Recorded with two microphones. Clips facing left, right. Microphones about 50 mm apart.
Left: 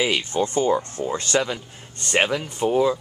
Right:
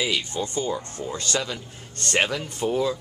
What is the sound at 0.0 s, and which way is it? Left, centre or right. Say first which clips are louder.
Speech: left 4 dB; left.